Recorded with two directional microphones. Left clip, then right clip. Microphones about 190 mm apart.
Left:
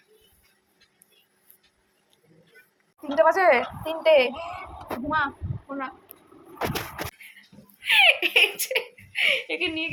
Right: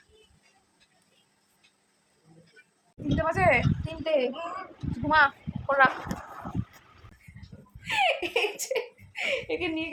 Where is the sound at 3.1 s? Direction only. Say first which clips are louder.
Left 6 dB; 35° left (ahead or behind).